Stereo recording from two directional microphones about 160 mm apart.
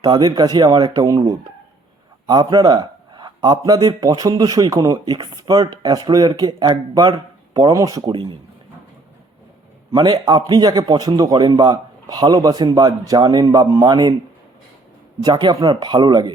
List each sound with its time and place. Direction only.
0.0 s a man's voice: 25° right (ahead or behind)
9.9 s a man's voice: 25° right (ahead or behind)
15.2 s a man's voice: 25° right (ahead or behind)